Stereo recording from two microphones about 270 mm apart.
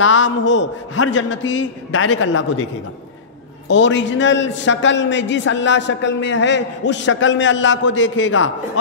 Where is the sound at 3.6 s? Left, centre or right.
Left.